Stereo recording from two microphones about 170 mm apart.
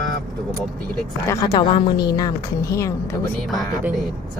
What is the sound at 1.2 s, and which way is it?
A woman's voice, 20° left (ahead or behind).